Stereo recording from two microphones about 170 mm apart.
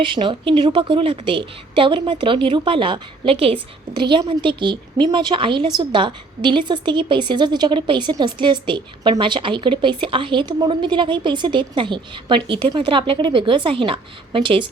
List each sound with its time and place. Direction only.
0.0 s a woman's voice: 30° right (ahead or behind)